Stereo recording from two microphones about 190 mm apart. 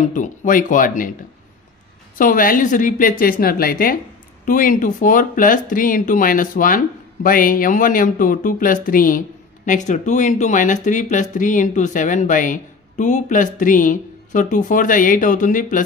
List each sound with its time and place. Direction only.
0.0 s speech: 45° left (ahead or behind)
2.1 s speech: 45° left (ahead or behind)